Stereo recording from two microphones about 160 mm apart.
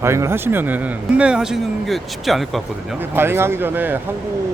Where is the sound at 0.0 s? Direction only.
15° right (ahead or behind); by 3.0 s centre (ahead or behind).